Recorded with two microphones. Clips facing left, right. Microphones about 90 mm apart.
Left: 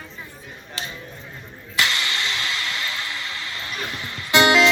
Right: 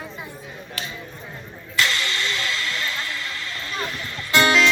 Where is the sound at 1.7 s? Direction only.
15° left (ahead or behind).